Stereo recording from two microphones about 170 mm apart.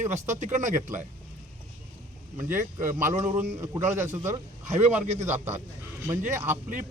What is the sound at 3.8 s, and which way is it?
Speech, 45° right (ahead or behind).